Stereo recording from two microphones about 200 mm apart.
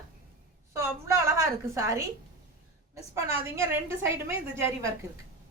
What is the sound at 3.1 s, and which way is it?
Speech, 15° right (ahead or behind).